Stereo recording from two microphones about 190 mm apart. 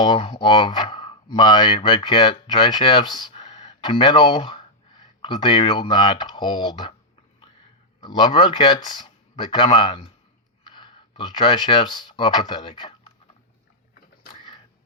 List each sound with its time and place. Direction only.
0.2 s speech: 30° left (ahead or behind)
8.0 s speech: 25° left (ahead or behind)